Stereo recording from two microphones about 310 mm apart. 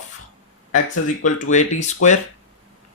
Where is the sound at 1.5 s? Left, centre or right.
Left.